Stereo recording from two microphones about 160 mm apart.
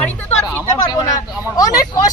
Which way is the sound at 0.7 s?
25° left (ahead or behind).